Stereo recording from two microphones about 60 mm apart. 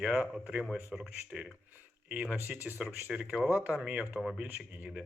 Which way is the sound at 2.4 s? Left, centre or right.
Right.